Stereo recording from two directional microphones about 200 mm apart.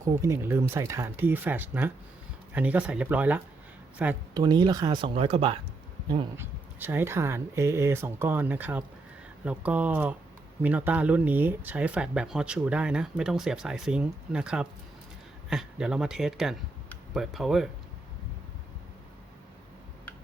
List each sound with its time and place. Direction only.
0.0 s speech: 15° right (ahead or behind)
4.4 s speech: 20° right (ahead or behind)
6.3 s speech: 10° right (ahead or behind)